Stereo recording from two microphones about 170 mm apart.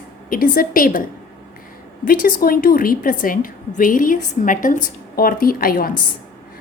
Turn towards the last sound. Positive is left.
turn(degrees=60)  # may be behind; listen again after turning